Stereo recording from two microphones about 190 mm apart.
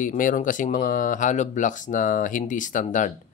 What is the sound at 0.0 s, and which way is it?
Speech, 45° left (ahead or behind).